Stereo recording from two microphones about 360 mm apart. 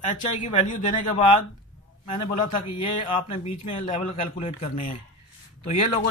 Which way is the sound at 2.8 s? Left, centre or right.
Centre.